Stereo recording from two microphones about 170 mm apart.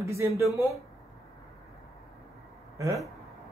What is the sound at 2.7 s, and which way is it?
Speech, 20° right (ahead or behind).